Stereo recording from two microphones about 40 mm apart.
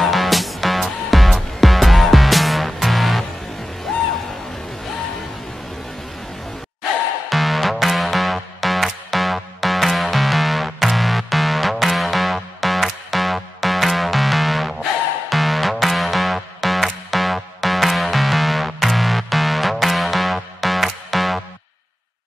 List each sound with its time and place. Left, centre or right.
0.0 s music: centre
7.2 s music: centre